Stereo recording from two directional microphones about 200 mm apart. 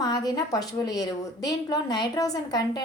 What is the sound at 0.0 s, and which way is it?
A woman's voice, 20° left (ahead or behind).